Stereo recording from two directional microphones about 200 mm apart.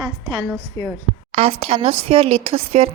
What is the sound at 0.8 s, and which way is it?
Speech, 20° left (ahead or behind).